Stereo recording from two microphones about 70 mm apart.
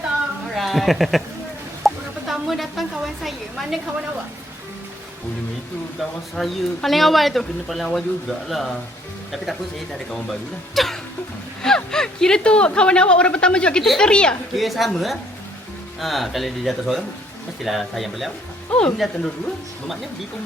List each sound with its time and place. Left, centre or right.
0.5 s a woman's voice: centre
1.8 s a sound: centre
6.0 s speech: centre
10.8 s speech: centre
14.5 s speech: centre
18.7 s speech: centre
18.9 s speech: centre